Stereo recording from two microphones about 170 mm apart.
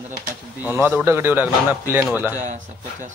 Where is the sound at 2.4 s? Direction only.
50° right (ahead or behind).